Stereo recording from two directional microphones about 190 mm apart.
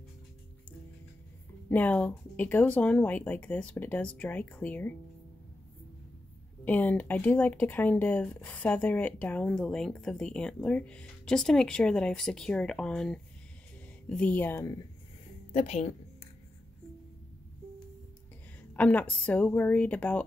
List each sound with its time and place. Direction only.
1.7 s speech: 10° left (ahead or behind)
6.6 s speech: 10° left (ahead or behind)
15.5 s a woman's voice: 35° left (ahead or behind)
18.7 s a woman's voice: 5° left (ahead or behind)